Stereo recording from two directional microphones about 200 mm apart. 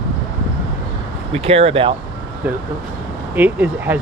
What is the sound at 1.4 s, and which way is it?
Speech, 30° right (ahead or behind).